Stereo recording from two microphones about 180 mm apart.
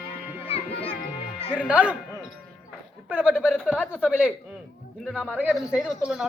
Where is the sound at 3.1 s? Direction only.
5° right (ahead or behind).